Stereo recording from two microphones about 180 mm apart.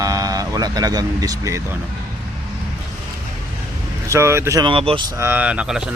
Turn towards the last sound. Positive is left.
turn(degrees=-5)  # may be behind; listen again after turning